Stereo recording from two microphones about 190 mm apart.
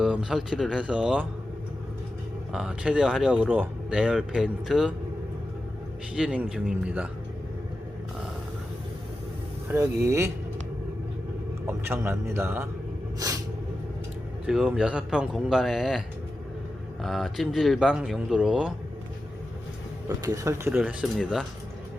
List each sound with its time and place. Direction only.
0.0 s speech: 5° right (ahead or behind)
2.5 s speech: 5° right (ahead or behind)
6.1 s speech: 5° right (ahead or behind)
9.6 s speech: 15° right (ahead or behind)
11.6 s speech: 10° right (ahead or behind)
13.1 s vehicle: 20° right (ahead or behind)
14.4 s speech: 5° right (ahead or behind)
20.1 s speech: 15° right (ahead or behind)